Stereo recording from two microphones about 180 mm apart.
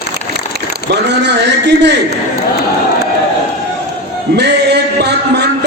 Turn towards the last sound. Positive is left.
turn(degrees=-70)  # may be behind; listen again after turning